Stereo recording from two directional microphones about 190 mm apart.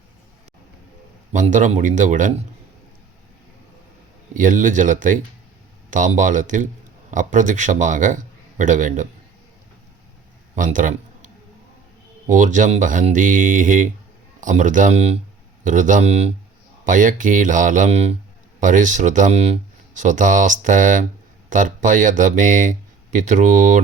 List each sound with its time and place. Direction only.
1.3 s speech: 40° right (ahead or behind)
4.4 s speech: 45° right (ahead or behind)
10.5 s a man's voice: 45° right (ahead or behind)
12.3 s speech: 40° right (ahead or behind)